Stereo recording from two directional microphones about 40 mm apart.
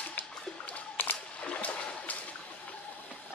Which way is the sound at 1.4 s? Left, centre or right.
Left.